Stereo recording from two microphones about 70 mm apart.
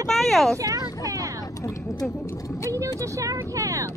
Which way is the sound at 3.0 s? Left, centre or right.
Right.